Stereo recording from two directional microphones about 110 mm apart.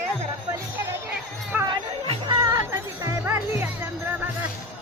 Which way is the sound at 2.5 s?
25° right (ahead or behind).